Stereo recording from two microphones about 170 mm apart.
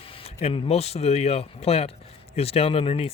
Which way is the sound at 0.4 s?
35° left (ahead or behind).